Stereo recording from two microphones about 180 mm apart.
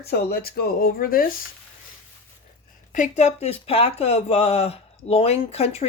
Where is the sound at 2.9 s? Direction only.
40° left (ahead or behind).